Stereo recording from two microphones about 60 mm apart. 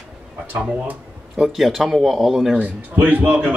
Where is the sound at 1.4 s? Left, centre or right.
Centre.